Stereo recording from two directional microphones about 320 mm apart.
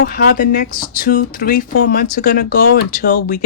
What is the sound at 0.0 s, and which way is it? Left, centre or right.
Speech, left.